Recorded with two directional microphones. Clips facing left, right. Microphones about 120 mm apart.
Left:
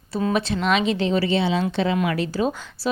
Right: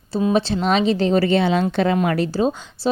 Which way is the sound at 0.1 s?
20° right (ahead or behind).